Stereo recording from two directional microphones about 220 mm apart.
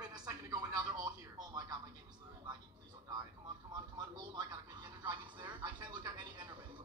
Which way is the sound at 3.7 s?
20° right (ahead or behind).